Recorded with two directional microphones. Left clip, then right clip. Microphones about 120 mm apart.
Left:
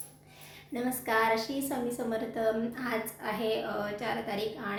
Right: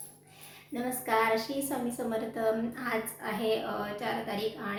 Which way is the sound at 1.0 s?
20° left (ahead or behind).